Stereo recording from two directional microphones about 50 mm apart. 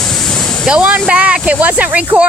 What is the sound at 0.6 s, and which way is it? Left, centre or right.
Speech, centre.